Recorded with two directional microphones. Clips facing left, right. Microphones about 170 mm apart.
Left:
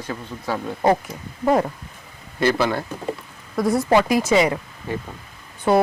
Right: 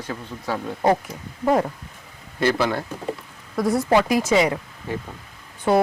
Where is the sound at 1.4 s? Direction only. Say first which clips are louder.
Left 1 dB; 25° left (ahead or behind).